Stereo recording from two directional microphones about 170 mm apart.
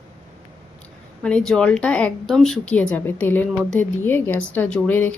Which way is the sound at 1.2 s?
5° left (ahead or behind).